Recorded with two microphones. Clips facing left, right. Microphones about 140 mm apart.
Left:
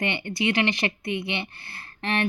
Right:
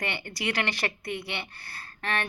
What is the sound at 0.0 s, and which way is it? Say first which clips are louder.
A woman's voice: left 6 dB; 20° left (ahead or behind).